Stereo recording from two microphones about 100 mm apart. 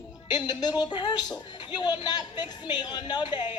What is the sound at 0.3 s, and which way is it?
A woman's voice, 45° left (ahead or behind).